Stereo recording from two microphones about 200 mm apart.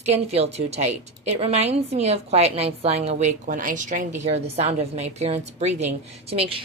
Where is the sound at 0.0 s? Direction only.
30° right (ahead or behind).